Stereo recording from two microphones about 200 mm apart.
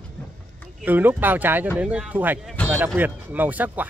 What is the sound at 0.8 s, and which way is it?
Speech, 10° right (ahead or behind).